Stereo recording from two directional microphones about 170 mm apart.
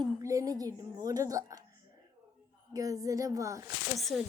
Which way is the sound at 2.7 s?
20° right (ahead or behind).